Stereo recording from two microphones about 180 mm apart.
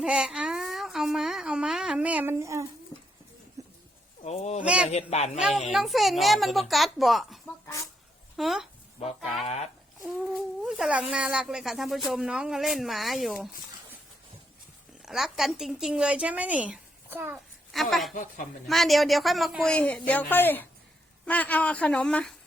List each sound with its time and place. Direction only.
0.0 s a woman's voice: 5° right (ahead or behind)
3.6 s a sound: 20° right (ahead or behind)
4.2 s speech: 35° left (ahead or behind)
4.6 s a man's voice: 5° right (ahead or behind)
4.9 s a man's voice: 35° left (ahead or behind)
5.4 s speech: 5° right (ahead or behind)
8.4 s speech: centre (ahead or behind)
9.4 s a man's voice: 35° left (ahead or behind)
10.6 s speech: 5° right (ahead or behind)
15.0 s speech: centre (ahead or behind)
17.7 s a woman's voice: centre (ahead or behind)
18.1 s speech: 50° left (ahead or behind)
18.7 s speech: centre (ahead or behind)